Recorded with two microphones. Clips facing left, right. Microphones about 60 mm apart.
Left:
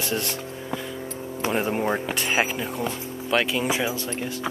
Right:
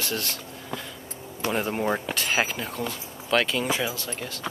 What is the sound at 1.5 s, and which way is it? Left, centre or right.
Speech, centre.